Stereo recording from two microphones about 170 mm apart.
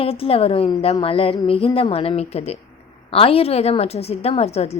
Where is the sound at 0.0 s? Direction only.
35° left (ahead or behind).